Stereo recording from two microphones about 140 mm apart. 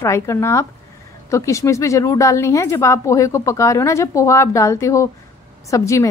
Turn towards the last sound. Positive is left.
turn(degrees=20)  # may be behind; listen again after turning